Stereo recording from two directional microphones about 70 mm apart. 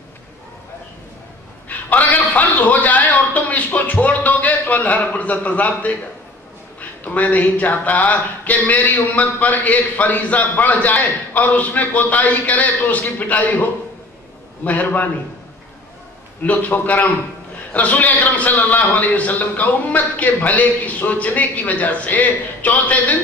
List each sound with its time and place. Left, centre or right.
1.7 s a sound: left
6.8 s speech: left
16.4 s speech: left